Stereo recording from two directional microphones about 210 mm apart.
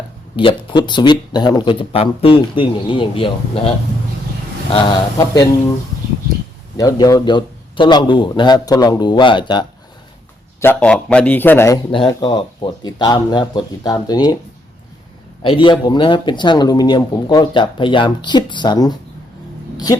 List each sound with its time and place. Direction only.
0.3 s speech: 25° left (ahead or behind)
4.7 s a man's voice: 20° left (ahead or behind)
6.7 s speech: 15° left (ahead or behind)
10.6 s a man's voice: 10° left (ahead or behind)
11.9 s speech: 25° left (ahead or behind)
15.4 s a man's voice: 25° left (ahead or behind)